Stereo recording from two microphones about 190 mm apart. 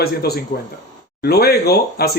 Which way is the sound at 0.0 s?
55° left (ahead or behind).